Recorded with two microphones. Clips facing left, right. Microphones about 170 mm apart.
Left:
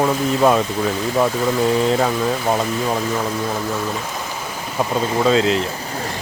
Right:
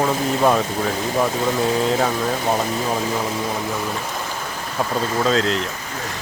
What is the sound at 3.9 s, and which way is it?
Speech, centre (ahead or behind).